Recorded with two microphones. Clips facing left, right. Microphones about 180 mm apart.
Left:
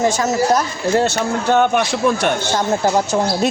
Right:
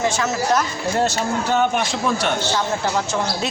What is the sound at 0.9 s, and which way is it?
A man's voice, 65° left (ahead or behind).